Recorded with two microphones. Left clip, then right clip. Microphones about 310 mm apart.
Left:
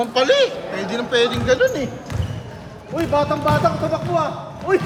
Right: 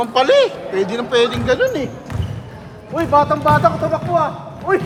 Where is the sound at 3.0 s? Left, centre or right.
Centre.